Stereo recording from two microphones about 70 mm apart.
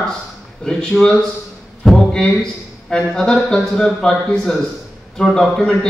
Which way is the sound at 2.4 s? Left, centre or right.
Centre.